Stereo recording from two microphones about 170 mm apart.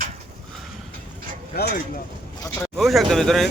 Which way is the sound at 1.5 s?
65° left (ahead or behind).